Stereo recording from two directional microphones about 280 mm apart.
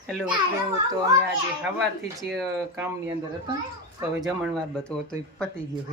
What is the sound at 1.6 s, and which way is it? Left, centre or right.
Speech, centre.